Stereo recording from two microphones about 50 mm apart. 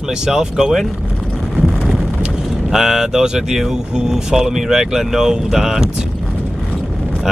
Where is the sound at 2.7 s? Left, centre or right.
Centre.